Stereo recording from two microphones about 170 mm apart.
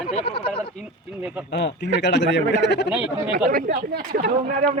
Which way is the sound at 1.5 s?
90° left.